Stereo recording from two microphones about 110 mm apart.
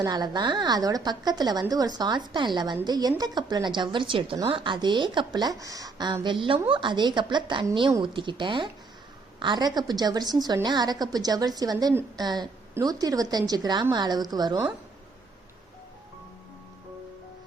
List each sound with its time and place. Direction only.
0.0 s a woman's voice: 40° right (ahead or behind)
6.2 s a woman's voice: 50° right (ahead or behind)